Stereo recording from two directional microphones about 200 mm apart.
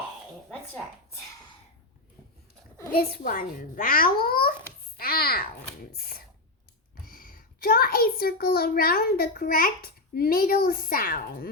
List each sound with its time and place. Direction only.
2.9 s a child's voice: 45° left (ahead or behind)